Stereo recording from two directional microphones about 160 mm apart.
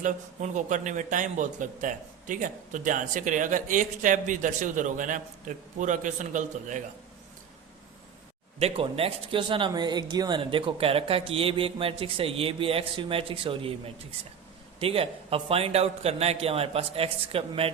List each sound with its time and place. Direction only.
0.0 s a man's voice: 50° right (ahead or behind)
8.5 s speech: 40° right (ahead or behind)